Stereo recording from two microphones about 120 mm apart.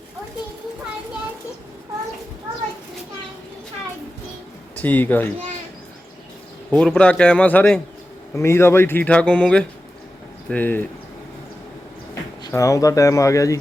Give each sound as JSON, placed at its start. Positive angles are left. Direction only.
{"t": 4.8, "sound": "speech", "side_deg": 15}
{"t": 6.7, "sound": "speech", "side_deg": 10}
{"t": 12.4, "sound": "speech", "side_deg": 25}